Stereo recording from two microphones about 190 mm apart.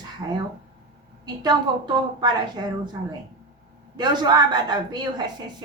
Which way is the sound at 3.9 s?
20° right (ahead or behind).